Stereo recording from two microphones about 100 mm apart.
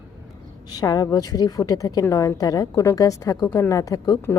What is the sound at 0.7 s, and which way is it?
A woman's voice, 40° left (ahead or behind).